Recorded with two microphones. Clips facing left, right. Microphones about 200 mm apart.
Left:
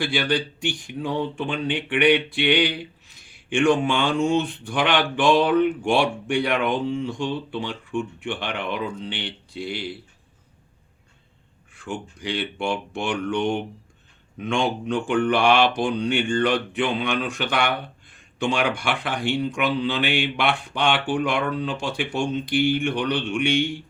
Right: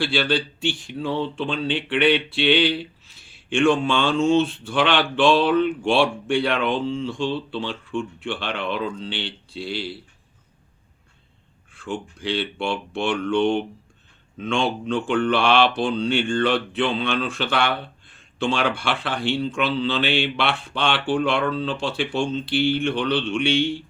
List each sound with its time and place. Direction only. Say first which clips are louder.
0.0 s speech: right 1 dB; 15° left (ahead or behind)
11.8 s speech: right 2 dB; 15° left (ahead or behind)